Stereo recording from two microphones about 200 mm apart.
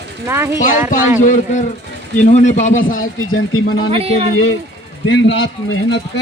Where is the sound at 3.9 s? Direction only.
30° right (ahead or behind).